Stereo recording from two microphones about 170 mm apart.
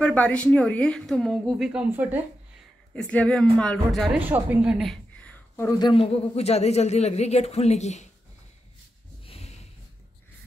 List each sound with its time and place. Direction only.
0.0 s a woman's voice: 5° left (ahead or behind); by 2.2 s 10° right (ahead or behind)
2.9 s a woman's voice: 5° left (ahead or behind)
5.8 s a man's voice: 30° left (ahead or behind)
9.2 s a sound: 35° left (ahead or behind)